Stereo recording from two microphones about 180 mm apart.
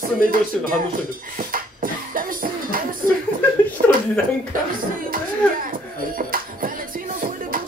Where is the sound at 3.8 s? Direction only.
50° right (ahead or behind).